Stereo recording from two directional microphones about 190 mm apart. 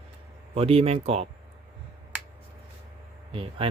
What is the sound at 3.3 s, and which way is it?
Speech, 30° right (ahead or behind).